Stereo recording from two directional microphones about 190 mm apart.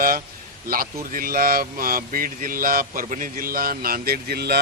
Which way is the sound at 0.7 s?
50° right (ahead or behind).